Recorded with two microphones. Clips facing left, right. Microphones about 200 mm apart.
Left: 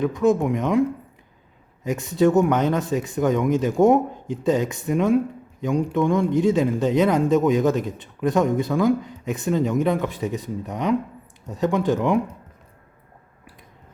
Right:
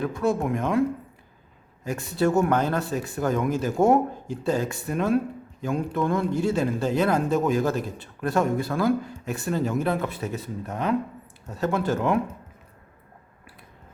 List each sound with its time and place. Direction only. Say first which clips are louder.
0.0 s speech: left 5 dB; 20° left (ahead or behind)